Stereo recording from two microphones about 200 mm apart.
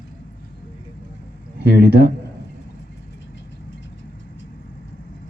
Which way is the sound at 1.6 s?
50° right (ahead or behind).